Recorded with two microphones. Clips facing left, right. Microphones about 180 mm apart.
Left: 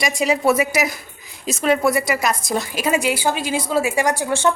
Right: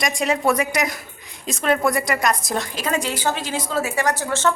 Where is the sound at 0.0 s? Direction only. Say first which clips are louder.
Left 2 dB; centre (ahead or behind).